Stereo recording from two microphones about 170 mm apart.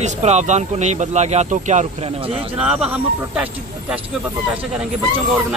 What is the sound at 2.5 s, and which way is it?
Speech, 5° right (ahead or behind).